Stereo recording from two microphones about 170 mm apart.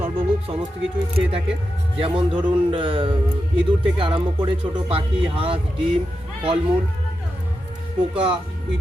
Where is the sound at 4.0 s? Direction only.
30° right (ahead or behind).